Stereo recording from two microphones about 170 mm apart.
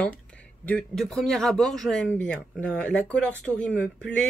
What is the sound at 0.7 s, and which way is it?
Speech, 5° left (ahead or behind).